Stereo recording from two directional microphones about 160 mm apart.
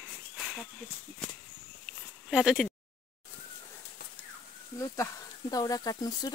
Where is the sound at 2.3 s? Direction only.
Centre (ahead or behind).